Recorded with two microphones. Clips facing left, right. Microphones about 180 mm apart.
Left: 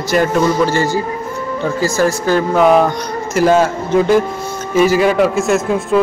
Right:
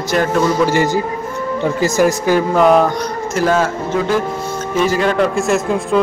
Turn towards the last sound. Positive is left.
turn(degrees=0)  # may be behind; listen again after turning